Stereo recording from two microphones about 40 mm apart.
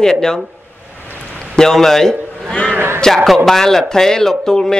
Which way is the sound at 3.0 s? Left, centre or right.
Centre.